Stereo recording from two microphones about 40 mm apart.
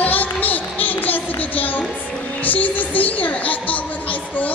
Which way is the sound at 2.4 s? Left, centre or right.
Left.